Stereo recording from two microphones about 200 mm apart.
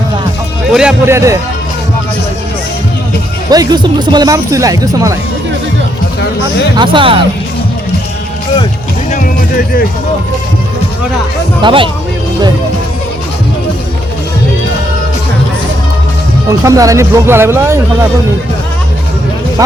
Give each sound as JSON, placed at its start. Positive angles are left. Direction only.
{"t": 0.7, "sound": "speech", "side_deg": -5}
{"t": 3.5, "sound": "speech", "side_deg": -20}
{"t": 6.7, "sound": "speech", "side_deg": -25}
{"t": 11.6, "sound": "speech", "side_deg": -25}
{"t": 16.5, "sound": "speech", "side_deg": -15}